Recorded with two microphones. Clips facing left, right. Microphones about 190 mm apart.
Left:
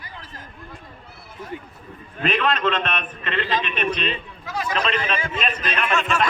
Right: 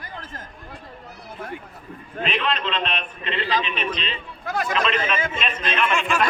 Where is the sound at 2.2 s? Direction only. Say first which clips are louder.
Left 4 dB; 45° left (ahead or behind).